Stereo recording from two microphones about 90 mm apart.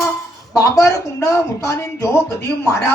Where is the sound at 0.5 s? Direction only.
40° left (ahead or behind).